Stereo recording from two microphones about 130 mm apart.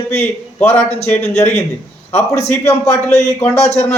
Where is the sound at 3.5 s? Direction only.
55° left (ahead or behind).